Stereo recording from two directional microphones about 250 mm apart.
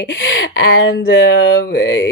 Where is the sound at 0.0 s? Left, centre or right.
Left.